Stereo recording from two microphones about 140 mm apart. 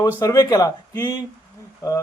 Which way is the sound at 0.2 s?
25° left (ahead or behind).